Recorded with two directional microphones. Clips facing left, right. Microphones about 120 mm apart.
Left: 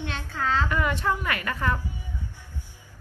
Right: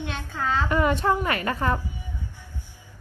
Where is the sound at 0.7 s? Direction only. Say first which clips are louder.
Right 4 dB; 30° right (ahead or behind).